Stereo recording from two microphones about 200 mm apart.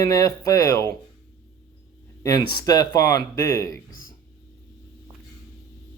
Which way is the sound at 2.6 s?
20° left (ahead or behind).